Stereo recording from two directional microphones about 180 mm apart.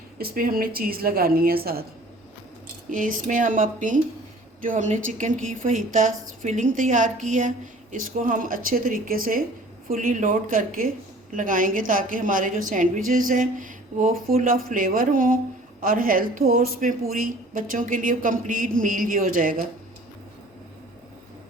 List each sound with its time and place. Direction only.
0.2 s a woman's voice: 55° right (ahead or behind)
2.9 s a woman's voice: 50° right (ahead or behind)